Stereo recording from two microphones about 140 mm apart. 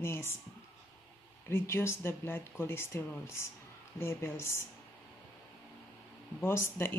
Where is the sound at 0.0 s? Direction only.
20° left (ahead or behind).